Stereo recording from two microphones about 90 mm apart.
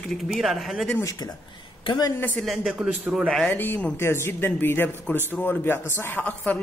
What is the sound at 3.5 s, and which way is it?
Speech, 20° left (ahead or behind).